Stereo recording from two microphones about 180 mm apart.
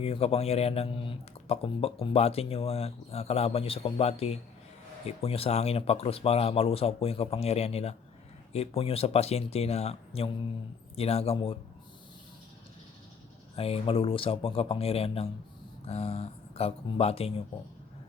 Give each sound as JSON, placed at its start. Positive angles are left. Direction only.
{"t": 0.0, "sound": "speech", "side_deg": 35}
{"t": 13.6, "sound": "speech", "side_deg": 30}